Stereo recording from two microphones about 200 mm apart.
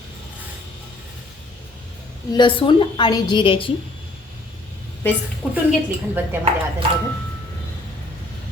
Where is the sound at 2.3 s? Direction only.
25° left (ahead or behind).